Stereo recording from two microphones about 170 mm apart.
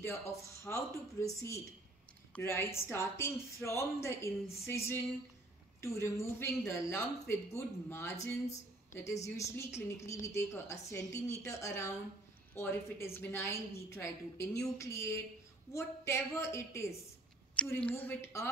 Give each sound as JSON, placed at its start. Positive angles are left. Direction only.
{"t": 0.0, "sound": "speech", "side_deg": 15}